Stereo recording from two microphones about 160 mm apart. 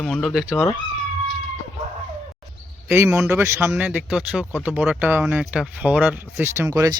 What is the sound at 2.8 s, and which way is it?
Speech, 10° right (ahead or behind).